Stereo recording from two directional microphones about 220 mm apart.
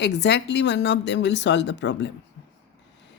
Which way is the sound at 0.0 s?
50° left (ahead or behind).